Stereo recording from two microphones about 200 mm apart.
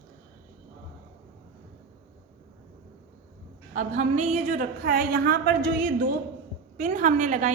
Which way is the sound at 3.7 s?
40° right (ahead or behind).